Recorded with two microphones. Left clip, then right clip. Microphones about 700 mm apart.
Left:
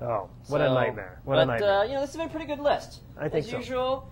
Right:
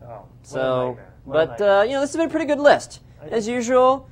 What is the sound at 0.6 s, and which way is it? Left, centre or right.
Speech, right.